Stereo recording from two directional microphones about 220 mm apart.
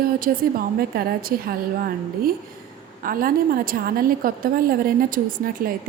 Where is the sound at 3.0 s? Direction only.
40° right (ahead or behind).